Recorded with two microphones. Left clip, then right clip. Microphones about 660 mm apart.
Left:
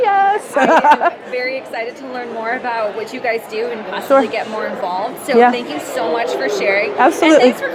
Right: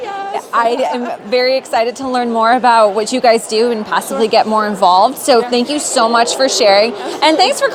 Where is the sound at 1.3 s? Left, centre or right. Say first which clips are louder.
Right 8 dB; right.